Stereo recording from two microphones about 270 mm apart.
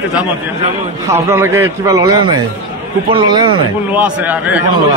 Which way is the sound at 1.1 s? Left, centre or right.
Centre.